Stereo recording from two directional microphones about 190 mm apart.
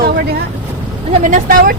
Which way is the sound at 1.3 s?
50° right (ahead or behind).